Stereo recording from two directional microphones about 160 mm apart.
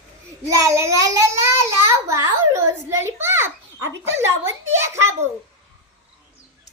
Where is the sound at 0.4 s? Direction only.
20° right (ahead or behind).